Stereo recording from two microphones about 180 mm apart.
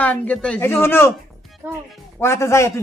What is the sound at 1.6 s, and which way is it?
Speech, 10° right (ahead or behind).